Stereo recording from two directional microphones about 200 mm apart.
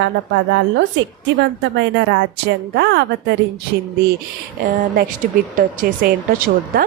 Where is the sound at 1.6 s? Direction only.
65° right (ahead or behind).